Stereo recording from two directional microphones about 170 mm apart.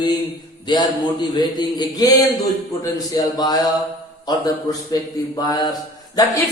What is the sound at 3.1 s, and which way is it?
A man's voice, 20° left (ahead or behind).